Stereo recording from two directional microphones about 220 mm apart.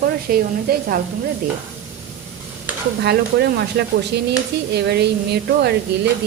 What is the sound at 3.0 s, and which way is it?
A woman's voice, 50° right (ahead or behind).